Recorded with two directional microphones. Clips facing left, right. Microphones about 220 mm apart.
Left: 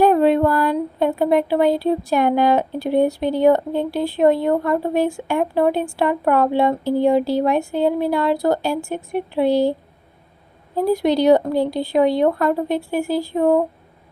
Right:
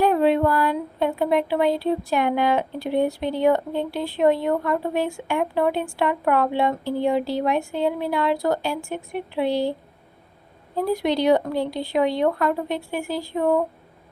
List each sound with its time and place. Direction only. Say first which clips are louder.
0.0 s speech: left 4 dB; 45° left (ahead or behind)
10.8 s speech: left 5 dB; 40° left (ahead or behind)